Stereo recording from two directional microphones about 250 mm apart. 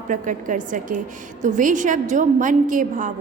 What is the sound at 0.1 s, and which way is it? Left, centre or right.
A woman's voice, right.